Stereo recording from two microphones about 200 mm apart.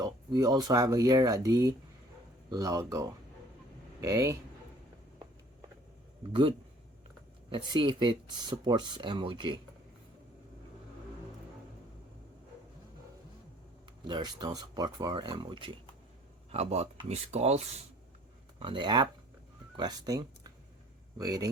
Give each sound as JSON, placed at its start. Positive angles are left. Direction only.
{"t": 0.0, "sound": "speech", "side_deg": -20}
{"t": 7.5, "sound": "speech", "side_deg": -25}
{"t": 14.1, "sound": "speech", "side_deg": -20}